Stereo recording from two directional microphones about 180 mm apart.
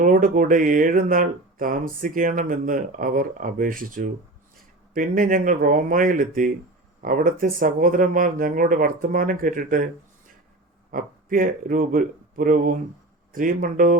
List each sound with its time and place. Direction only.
0.0 s speech: 50° right (ahead or behind)